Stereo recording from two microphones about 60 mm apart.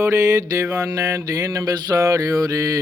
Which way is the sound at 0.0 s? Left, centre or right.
Right.